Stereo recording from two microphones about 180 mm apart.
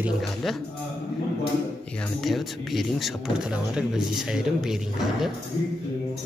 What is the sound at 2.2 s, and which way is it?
Speech, centre (ahead or behind).